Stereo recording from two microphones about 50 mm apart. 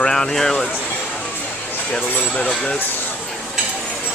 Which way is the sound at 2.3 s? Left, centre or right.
Centre.